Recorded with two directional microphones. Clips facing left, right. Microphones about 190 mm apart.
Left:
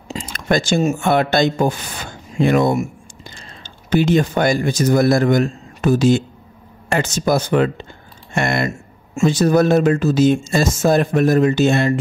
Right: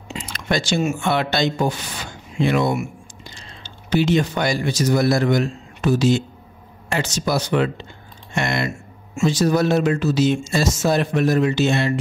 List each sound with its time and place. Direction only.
0.3 s speech: 50° left (ahead or behind)